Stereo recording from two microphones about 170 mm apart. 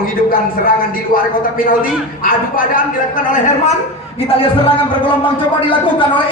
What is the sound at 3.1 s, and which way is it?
A man's voice, 50° left (ahead or behind).